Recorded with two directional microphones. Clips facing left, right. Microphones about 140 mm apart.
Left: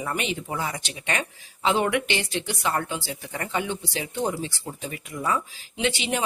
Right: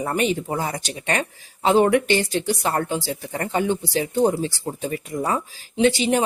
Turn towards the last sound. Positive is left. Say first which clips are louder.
# right 8 dB
turn(degrees=-40)  # may be behind; listen again after turning